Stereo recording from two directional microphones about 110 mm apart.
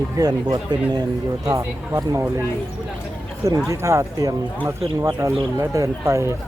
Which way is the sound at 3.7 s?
30° right (ahead or behind).